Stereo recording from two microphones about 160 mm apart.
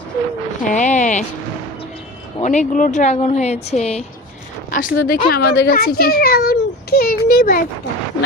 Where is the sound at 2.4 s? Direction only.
50° left (ahead or behind).